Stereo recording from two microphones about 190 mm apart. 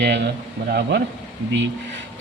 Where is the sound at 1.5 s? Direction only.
70° right (ahead or behind).